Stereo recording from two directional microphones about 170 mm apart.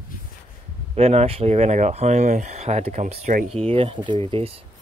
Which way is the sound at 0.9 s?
35° right (ahead or behind).